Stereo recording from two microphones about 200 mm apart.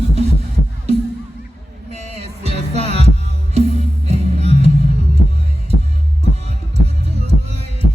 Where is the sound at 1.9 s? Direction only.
30° right (ahead or behind).